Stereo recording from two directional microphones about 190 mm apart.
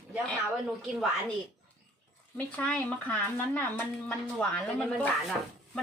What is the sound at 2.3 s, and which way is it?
Speech, 5° left (ahead or behind).